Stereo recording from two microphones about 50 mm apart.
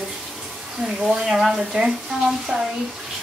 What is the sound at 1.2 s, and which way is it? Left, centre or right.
A woman's voice, centre.